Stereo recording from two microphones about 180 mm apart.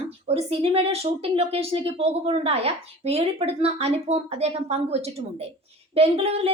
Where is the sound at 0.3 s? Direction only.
35° right (ahead or behind).